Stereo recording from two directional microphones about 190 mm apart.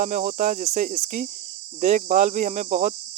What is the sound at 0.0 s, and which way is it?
Speech, 40° right (ahead or behind).